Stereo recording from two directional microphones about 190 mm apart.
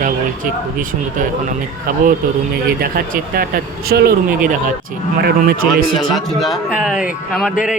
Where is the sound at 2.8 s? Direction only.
50° right (ahead or behind).